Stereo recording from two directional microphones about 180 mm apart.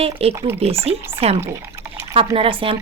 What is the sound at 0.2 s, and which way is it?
Speech, 35° right (ahead or behind).